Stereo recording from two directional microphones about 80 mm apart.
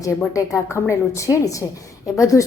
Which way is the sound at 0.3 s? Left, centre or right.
Left.